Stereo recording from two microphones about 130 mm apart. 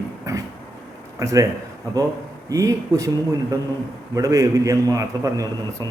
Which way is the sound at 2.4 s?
25° right (ahead or behind).